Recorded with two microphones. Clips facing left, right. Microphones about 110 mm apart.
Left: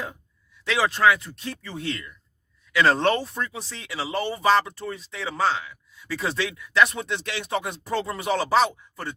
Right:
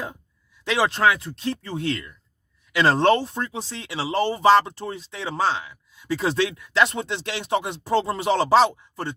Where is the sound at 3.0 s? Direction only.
25° right (ahead or behind).